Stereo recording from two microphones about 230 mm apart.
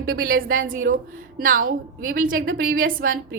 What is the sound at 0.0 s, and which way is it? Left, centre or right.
A woman's voice, right.